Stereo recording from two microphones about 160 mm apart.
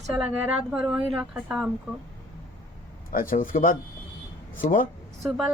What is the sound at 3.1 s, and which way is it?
Speech, 60° left (ahead or behind).